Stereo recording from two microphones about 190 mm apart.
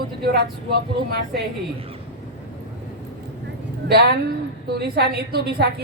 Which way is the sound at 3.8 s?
60° right (ahead or behind).